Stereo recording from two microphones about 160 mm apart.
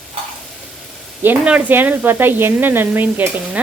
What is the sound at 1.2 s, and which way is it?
Speech, 10° right (ahead or behind).